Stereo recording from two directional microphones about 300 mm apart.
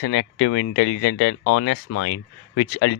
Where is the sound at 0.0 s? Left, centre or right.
Left.